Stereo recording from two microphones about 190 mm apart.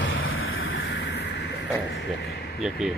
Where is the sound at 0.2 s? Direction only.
90° left.